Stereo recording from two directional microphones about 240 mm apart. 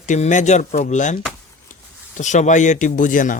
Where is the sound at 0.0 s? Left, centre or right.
Left.